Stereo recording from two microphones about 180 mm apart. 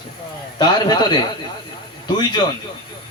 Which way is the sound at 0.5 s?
25° left (ahead or behind).